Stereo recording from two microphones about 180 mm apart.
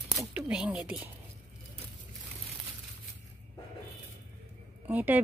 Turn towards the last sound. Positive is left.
turn(degrees=-10)  # may be behind; listen again after turning